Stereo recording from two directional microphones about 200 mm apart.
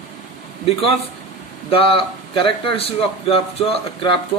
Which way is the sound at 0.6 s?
30° left (ahead or behind).